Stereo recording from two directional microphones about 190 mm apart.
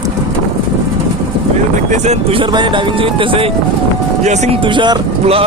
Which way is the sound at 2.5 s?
25° right (ahead or behind).